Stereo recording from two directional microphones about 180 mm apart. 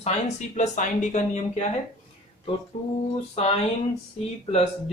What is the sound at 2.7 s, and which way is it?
Speech, 40° left (ahead or behind).